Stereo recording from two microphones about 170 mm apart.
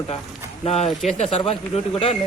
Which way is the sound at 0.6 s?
40° left (ahead or behind).